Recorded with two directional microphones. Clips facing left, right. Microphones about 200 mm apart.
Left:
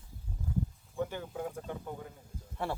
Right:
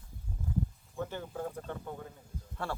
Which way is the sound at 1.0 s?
10° left (ahead or behind).